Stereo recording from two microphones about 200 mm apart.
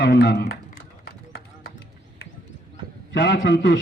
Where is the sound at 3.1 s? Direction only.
65° left (ahead or behind).